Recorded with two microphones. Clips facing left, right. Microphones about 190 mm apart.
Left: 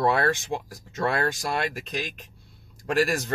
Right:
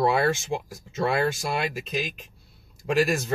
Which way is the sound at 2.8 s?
5° right (ahead or behind).